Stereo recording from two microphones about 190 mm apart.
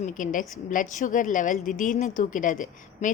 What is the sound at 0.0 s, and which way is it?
A woman's voice, 45° left (ahead or behind).